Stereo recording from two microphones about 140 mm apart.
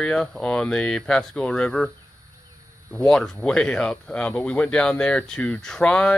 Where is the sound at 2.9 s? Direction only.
5° left (ahead or behind).